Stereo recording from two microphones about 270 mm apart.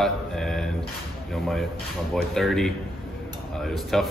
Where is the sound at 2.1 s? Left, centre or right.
Centre.